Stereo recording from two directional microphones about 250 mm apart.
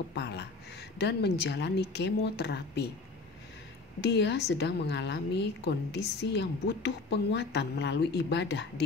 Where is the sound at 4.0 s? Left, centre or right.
Left.